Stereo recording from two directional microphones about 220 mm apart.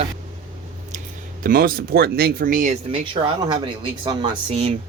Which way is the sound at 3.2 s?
20° right (ahead or behind).